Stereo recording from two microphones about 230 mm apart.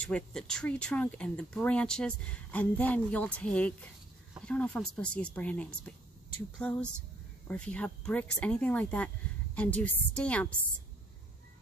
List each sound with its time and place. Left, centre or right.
0.0 s a woman's voice: centre